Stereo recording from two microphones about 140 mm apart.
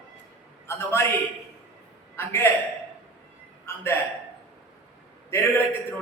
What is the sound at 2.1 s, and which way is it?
Speech, 15° left (ahead or behind).